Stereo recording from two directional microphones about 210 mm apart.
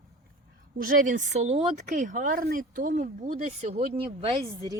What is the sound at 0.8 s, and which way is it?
Speech, 40° right (ahead or behind).